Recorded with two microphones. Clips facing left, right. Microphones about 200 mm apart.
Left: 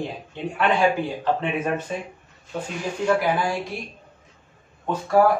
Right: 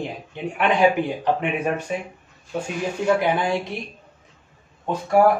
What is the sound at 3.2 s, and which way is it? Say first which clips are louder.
Speech: right 2 dB; 20° right (ahead or behind).